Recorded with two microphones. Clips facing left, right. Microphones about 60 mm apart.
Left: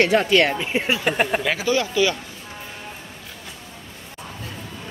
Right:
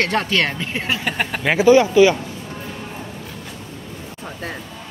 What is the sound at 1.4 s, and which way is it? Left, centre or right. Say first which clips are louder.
Speech: right 9 dB; right.